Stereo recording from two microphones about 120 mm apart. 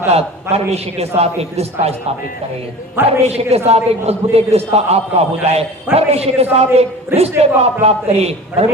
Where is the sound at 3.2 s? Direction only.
60° right (ahead or behind).